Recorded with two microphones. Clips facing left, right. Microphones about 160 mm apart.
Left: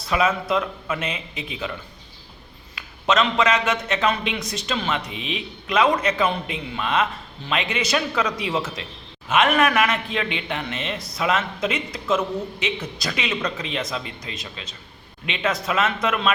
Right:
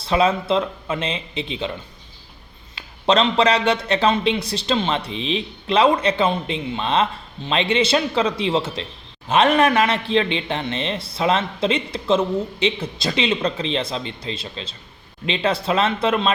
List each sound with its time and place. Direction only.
0.0 s a man's voice: 30° right (ahead or behind)
2.7 s a man's voice: 30° right (ahead or behind)